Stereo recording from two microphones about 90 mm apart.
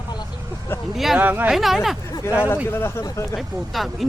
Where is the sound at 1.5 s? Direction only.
Centre (ahead or behind).